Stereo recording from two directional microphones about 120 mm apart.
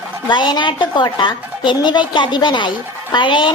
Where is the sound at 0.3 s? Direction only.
40° left (ahead or behind).